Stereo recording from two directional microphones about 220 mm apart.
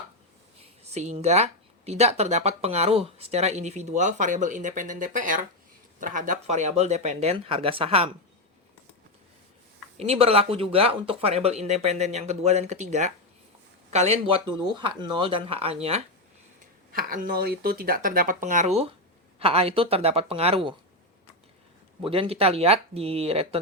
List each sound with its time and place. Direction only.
0.9 s speech: 30° right (ahead or behind)
10.0 s speech: 25° right (ahead or behind)
16.9 s speech: 40° right (ahead or behind); by 20.7 s 25° right (ahead or behind)
22.0 s speech: 25° right (ahead or behind)